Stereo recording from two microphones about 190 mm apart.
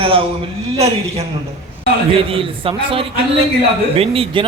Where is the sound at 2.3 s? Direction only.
30° right (ahead or behind).